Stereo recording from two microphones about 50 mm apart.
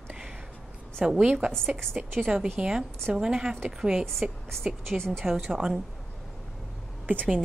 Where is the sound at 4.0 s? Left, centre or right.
Centre.